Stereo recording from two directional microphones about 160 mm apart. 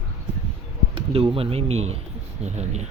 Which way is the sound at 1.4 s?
40° right (ahead or behind).